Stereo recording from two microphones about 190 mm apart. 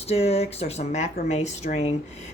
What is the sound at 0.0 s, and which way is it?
A woman's voice, 35° left (ahead or behind).